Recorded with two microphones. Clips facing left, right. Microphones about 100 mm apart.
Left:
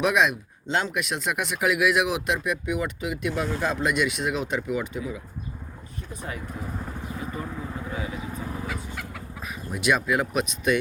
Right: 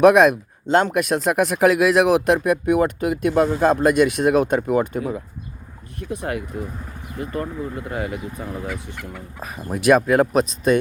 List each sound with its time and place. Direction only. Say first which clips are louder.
0.0 s speech: right 10 dB; 50° right (ahead or behind)
6.0 s speech: right 10 dB; 70° right (ahead or behind)
9.4 s speech: right 6 dB; 45° right (ahead or behind)